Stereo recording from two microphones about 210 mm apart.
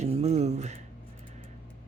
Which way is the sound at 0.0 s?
30° right (ahead or behind).